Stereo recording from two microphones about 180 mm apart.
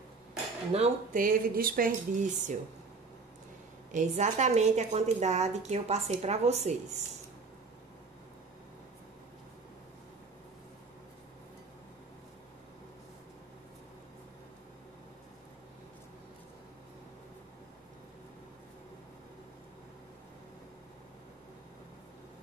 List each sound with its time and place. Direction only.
0.7 s a woman's voice: 35° right (ahead or behind)
1.2 s speech: 50° right (ahead or behind)
3.9 s a woman's voice: 40° right (ahead or behind)